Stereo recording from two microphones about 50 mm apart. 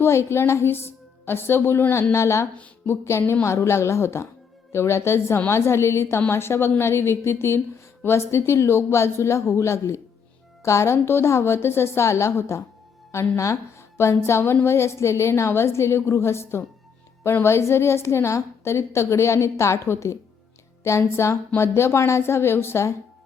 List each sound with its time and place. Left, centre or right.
0.0 s a woman's voice: left
2.1 s a woman's voice: left